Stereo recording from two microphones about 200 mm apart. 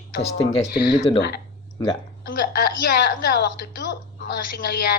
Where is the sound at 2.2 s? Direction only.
45° left (ahead or behind).